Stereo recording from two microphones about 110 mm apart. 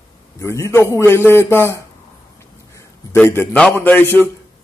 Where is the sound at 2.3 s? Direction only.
25° left (ahead or behind).